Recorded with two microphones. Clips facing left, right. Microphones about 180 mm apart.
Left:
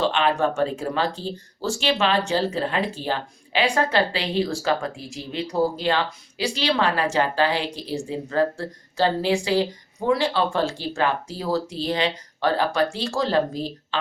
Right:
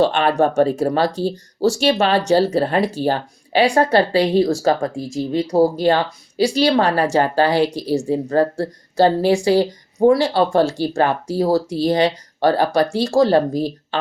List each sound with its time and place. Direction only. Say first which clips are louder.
0.0 s speech: right 5 dB; 45° right (ahead or behind)